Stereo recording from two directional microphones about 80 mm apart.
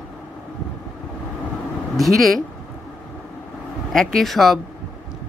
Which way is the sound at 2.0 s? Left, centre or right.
Centre.